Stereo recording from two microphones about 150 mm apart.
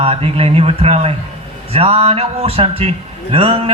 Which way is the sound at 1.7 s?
40° right (ahead or behind).